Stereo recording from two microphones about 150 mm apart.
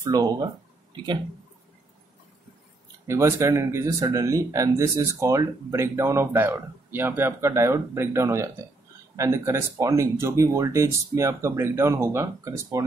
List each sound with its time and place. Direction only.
0.0 s speech: 25° right (ahead or behind)
3.1 s speech: 20° right (ahead or behind)